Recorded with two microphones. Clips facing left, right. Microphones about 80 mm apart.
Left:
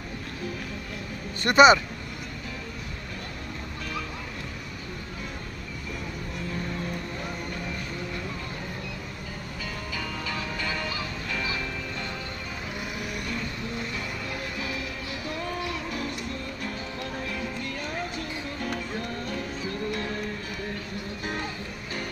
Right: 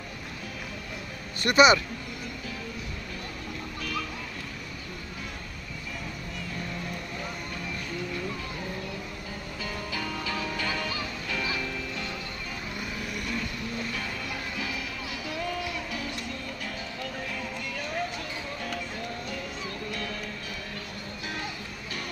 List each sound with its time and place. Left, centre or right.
1.4 s speech: left
9.9 s music: centre
15.9 s music: left